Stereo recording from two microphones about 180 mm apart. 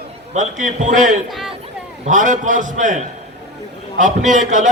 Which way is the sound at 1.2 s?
Centre (ahead or behind).